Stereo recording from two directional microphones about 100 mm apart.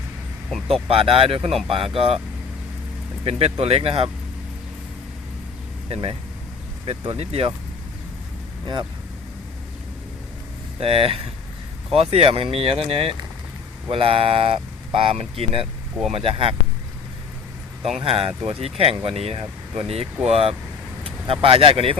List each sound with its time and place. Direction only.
0.7 s speech: 70° right (ahead or behind)
3.2 s speech: 85° right
5.9 s speech: 70° right (ahead or behind)
8.6 s speech: 50° right (ahead or behind)
10.8 s speech: 75° right (ahead or behind)
18.0 s speech: 75° right (ahead or behind)
21.0 s speech: 70° right (ahead or behind)